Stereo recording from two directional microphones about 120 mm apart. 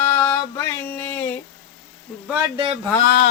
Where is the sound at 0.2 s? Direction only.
15° left (ahead or behind).